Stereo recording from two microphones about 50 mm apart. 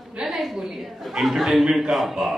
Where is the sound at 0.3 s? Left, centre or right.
Centre.